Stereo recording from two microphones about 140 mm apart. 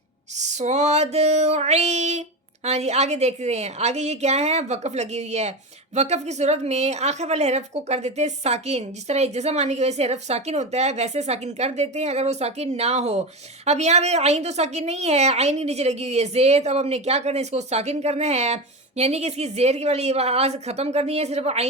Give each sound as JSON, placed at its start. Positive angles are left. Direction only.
{"t": 0.3, "sound": "a woman's voice", "side_deg": -55}